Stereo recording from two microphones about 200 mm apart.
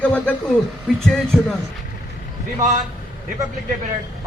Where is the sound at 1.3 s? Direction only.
5° right (ahead or behind).